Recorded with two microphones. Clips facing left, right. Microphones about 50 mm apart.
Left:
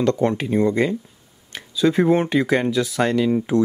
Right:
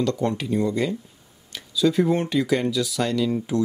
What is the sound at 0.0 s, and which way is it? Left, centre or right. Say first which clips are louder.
Speech: left 4 dB; left.